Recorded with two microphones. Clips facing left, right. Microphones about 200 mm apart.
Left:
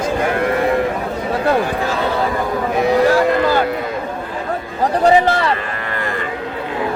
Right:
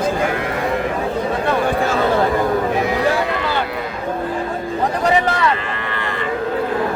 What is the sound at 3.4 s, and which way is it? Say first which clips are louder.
Cattle: left 6 dB; 45° left (ahead or behind).